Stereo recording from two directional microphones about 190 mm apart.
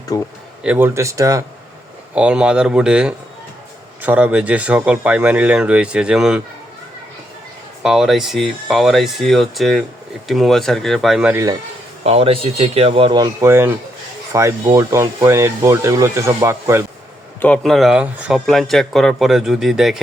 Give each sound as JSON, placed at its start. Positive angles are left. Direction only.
{"t": 0.1, "sound": "speech", "side_deg": 15}
{"t": 0.6, "sound": "speech", "side_deg": -10}
{"t": 2.1, "sound": "speech", "side_deg": -5}
{"t": 7.8, "sound": "speech", "side_deg": 0}
{"t": 12.0, "sound": "speech", "side_deg": -30}
{"t": 17.4, "sound": "speech", "side_deg": 5}